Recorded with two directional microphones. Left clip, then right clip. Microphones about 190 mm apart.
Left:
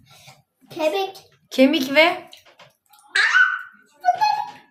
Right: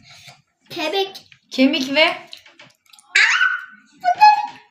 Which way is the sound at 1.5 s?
Centre (ahead or behind).